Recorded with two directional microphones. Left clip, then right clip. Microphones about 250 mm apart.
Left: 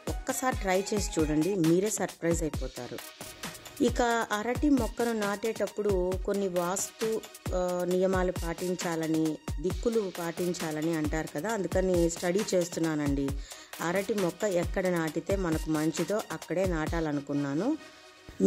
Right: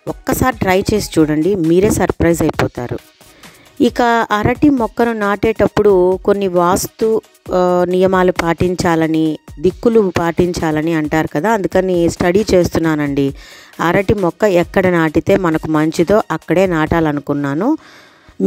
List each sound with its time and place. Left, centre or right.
0.1 s speech: right
3.8 s speech: right